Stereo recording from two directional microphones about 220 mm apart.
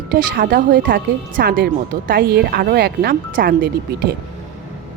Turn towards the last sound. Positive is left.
turn(degrees=-45)  # may be behind; listen again after turning